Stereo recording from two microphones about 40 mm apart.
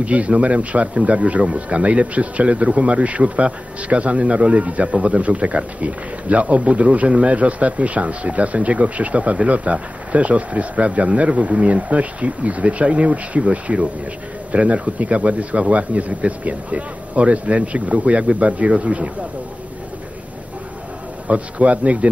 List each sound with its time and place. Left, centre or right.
0.0 s a man's voice: right
21.3 s a man's voice: right